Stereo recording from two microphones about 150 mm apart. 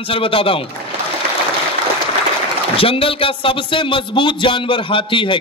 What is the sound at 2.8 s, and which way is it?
Speech, 40° left (ahead or behind).